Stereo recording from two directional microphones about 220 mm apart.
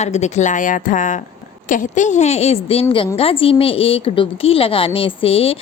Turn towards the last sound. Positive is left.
turn(degrees=25)  # may be behind; listen again after turning